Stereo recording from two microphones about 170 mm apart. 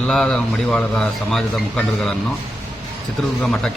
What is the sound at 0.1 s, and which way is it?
A man's voice, 5° left (ahead or behind).